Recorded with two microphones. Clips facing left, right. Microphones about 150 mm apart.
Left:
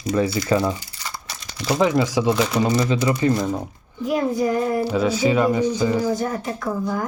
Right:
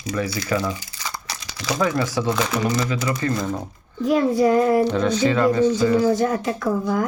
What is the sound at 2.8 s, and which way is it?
Speech, 25° left (ahead or behind).